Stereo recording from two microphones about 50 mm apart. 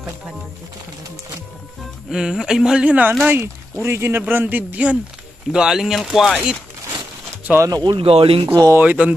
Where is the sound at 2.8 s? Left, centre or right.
Right.